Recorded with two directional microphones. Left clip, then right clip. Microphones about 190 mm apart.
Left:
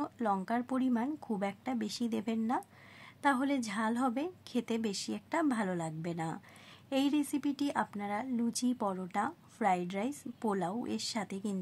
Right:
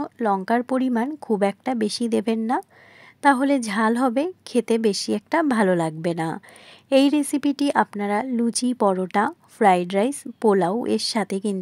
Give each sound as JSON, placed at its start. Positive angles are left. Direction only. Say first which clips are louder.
{"t": 0.0, "sound": "speech", "louder": "right 11 dB", "side_deg": -35}